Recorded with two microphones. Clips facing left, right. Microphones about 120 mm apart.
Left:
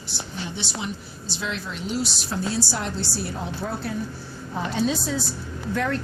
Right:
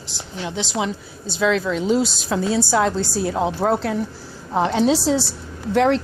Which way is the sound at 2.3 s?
90° right.